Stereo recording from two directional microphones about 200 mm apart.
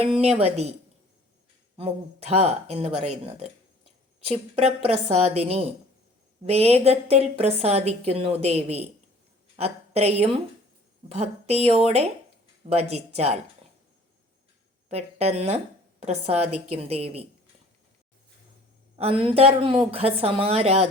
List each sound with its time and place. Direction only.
0.0 s a woman's voice: 30° right (ahead or behind)
1.7 s a woman's voice: 30° right (ahead or behind)
12.9 s a woman's voice: 30° right (ahead or behind)
14.8 s a woman's voice: 30° right (ahead or behind)
18.9 s a woman's voice: 25° right (ahead or behind)